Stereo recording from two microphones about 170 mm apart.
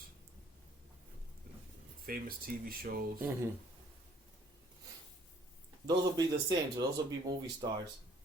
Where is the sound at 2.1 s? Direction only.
60° right (ahead or behind).